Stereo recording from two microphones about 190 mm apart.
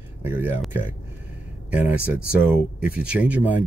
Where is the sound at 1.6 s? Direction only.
5° right (ahead or behind).